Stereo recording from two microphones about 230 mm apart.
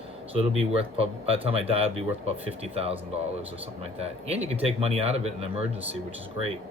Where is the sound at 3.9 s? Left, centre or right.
Right.